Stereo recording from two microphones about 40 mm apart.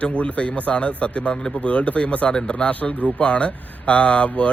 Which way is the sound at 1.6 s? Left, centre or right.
Left.